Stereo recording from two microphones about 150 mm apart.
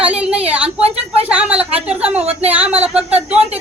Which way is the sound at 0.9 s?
40° right (ahead or behind).